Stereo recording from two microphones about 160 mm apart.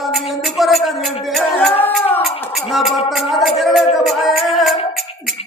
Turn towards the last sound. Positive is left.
turn(degrees=0)  # may be behind; listen again after turning